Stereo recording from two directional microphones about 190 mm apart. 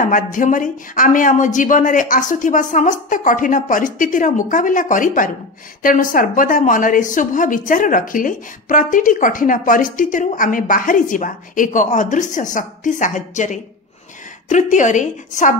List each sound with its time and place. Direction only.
0.0 s a woman's voice: 45° left (ahead or behind)